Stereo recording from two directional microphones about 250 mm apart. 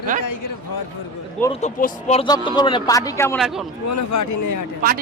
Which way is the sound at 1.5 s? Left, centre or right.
Left.